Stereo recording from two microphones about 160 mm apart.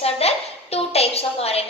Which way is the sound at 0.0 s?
40° left (ahead or behind).